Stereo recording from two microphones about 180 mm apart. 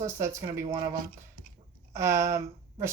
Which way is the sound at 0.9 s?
50° right (ahead or behind).